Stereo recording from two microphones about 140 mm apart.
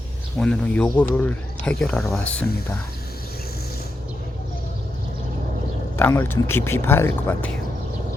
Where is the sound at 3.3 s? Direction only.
90° left.